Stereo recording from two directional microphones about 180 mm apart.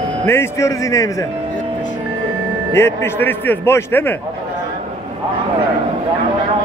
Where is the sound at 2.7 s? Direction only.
15° left (ahead or behind).